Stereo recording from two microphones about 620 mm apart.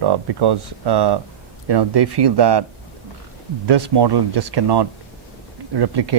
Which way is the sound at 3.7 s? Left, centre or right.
Right.